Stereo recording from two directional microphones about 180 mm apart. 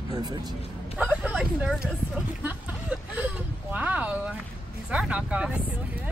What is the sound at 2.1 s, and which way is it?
Vehicle, 5° right (ahead or behind).